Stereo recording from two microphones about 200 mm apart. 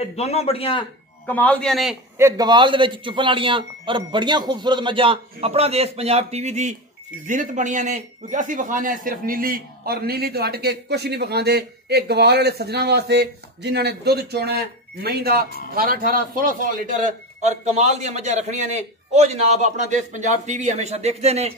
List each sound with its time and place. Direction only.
0.0 s a man's voice: 30° left (ahead or behind)
1.2 s a man's voice: 10° left (ahead or behind)
2.1 s a man's voice: 15° right (ahead or behind); by 21.5 s 30° right (ahead or behind)